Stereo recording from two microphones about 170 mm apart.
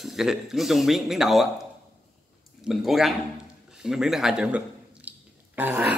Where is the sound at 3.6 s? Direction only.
5° right (ahead or behind).